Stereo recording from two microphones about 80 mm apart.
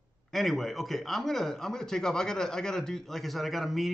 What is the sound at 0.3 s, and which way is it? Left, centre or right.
Speech, centre.